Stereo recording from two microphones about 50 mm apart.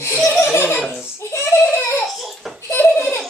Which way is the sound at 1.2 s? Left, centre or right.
Left.